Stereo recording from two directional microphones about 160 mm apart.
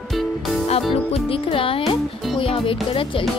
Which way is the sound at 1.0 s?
35° left (ahead or behind).